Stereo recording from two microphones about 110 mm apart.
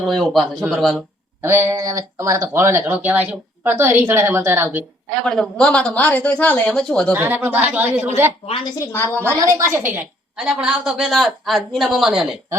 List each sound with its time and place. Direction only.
0.1 s a woman's voice: 5° left (ahead or behind)
1.4 s speech: 25° right (ahead or behind)
5.2 s speech: 5° left (ahead or behind)
7.1 s speech: 20° right (ahead or behind)
8.9 s a woman's voice: 20° left (ahead or behind)
9.3 s speech: 25° right (ahead or behind)
10.3 s a woman's voice: 10° right (ahead or behind)